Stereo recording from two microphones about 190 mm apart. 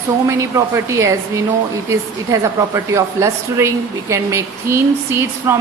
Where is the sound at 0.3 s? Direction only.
15° right (ahead or behind).